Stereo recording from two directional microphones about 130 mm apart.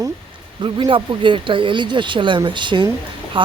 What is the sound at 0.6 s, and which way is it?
Speech, 40° right (ahead or behind).